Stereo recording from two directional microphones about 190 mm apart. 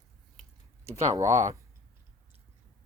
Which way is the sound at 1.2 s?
40° right (ahead or behind).